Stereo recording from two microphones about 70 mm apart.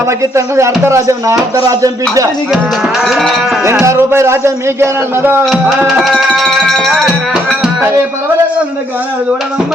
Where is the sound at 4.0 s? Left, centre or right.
Right.